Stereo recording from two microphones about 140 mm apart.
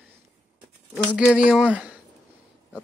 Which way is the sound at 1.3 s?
10° right (ahead or behind).